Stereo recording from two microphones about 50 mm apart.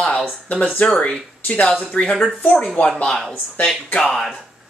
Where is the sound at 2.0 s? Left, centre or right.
Left.